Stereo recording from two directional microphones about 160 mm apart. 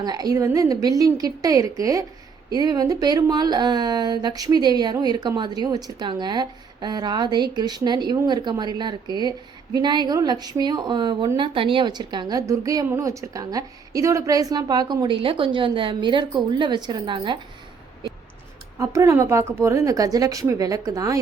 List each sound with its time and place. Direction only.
0.0 s speech: 25° right (ahead or behind)
18.8 s speech: 20° right (ahead or behind)